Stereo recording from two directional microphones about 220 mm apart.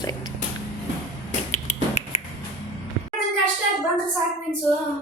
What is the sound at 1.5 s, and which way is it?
Music, 30° left (ahead or behind).